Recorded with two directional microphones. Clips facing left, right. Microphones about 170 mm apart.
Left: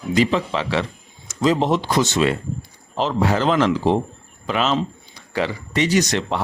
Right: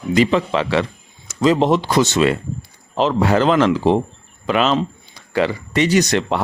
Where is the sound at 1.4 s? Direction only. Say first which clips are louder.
Right 3 dB; 85° right.